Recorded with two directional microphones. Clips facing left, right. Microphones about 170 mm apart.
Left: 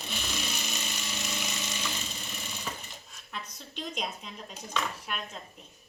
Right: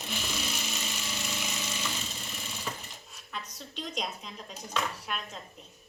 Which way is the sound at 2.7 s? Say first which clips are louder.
Right 1 dB; 5° left (ahead or behind).